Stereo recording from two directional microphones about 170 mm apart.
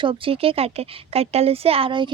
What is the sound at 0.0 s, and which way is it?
Speech, 30° right (ahead or behind).